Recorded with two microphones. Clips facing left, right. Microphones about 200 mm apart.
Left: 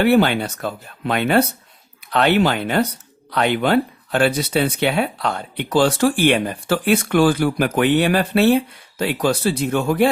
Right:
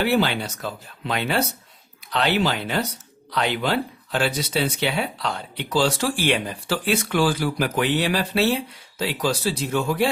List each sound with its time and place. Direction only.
0.0 s speech: 55° left (ahead or behind)